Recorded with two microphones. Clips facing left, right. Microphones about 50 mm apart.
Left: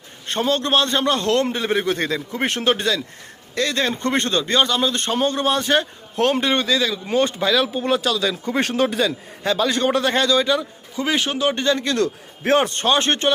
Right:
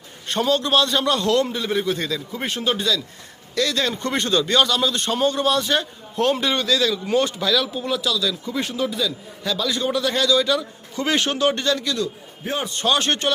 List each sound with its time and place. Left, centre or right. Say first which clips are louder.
0.3 s a man's voice: even; left
2.3 s speech: left 4 dB; left
3.5 s a man's voice: left 1 dB; left
6.4 s a man's voice: left 2 dB; left
6.7 s speech: even; centre
7.1 s a man's voice: left 3 dB; left
8.6 s a man's voice: left 5 dB; left
10.4 s speech: left 1 dB; centre
11.5 s speech: left 2 dB; left
11.9 s a man's voice: left 4 dB; left
12.8 s a man's voice: left 2 dB; left